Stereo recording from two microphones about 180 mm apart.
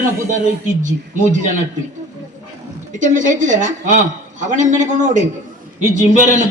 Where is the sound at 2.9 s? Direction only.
45° right (ahead or behind).